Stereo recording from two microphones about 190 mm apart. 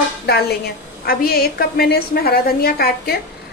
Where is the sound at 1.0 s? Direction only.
55° left (ahead or behind).